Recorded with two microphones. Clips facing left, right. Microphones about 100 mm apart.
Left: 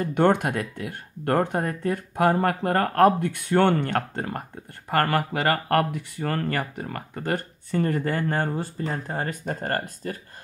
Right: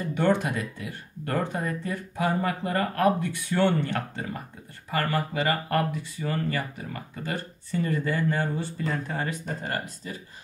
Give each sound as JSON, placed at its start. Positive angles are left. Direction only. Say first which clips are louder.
{"t": 0.0, "sound": "speech", "louder": "left 4 dB", "side_deg": 60}